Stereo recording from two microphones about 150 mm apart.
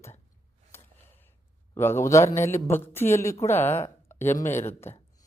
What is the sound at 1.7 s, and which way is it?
Speech, 15° left (ahead or behind).